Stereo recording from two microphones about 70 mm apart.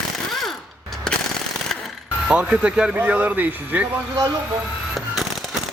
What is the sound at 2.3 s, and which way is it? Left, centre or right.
Speech, centre.